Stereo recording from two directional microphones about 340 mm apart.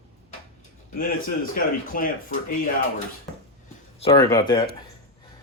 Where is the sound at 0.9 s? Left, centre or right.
Left.